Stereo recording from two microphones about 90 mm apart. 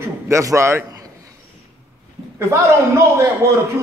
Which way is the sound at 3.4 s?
30° right (ahead or behind).